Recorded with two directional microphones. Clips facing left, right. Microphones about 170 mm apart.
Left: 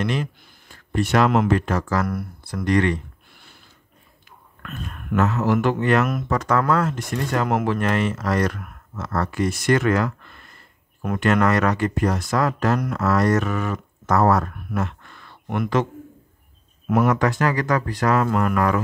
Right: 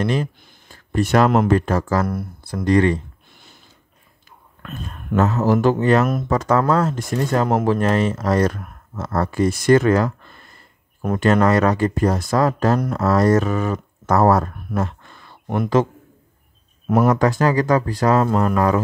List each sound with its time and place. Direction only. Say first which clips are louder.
0.0 s speech: right 3 dB; 35° right (ahead or behind)
4.6 s speech: right 2 dB; 30° right (ahead or behind)
16.9 s speech: right 3 dB; 35° right (ahead or behind)